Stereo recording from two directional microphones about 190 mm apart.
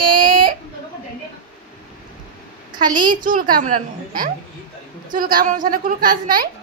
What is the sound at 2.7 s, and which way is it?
A child's voice, 45° right (ahead or behind).